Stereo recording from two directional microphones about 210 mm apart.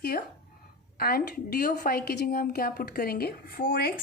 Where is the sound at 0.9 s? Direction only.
45° left (ahead or behind).